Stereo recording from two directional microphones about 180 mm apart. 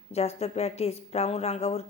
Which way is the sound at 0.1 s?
35° left (ahead or behind).